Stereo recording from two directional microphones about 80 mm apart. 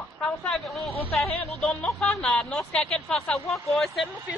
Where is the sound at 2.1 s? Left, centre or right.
Centre.